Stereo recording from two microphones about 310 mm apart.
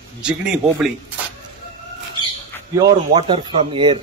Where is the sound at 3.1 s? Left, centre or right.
Centre.